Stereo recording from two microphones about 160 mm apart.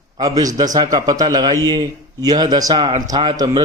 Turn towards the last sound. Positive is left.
turn(degrees=-25)  # may be behind; listen again after turning